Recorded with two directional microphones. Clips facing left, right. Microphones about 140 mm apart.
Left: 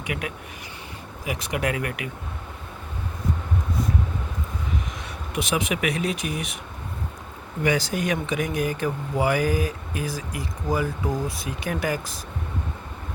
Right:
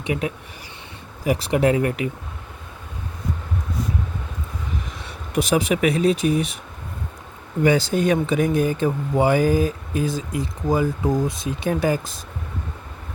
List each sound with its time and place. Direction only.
0.0 s speech: 30° right (ahead or behind)
5.3 s speech: 35° right (ahead or behind)
7.6 s speech: 30° right (ahead or behind)